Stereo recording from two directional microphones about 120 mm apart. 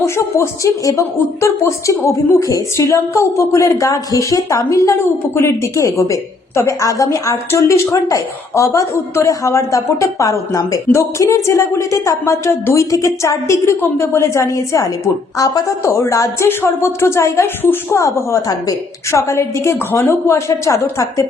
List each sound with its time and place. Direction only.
0.0 s speech: 25° left (ahead or behind)